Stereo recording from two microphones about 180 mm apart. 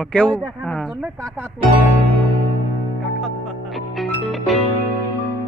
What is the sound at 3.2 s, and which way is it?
Music, centre (ahead or behind).